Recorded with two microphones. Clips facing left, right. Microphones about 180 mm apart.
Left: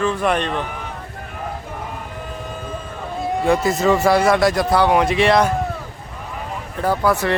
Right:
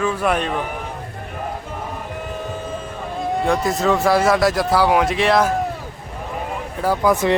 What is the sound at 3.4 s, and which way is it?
Speech, centre (ahead or behind).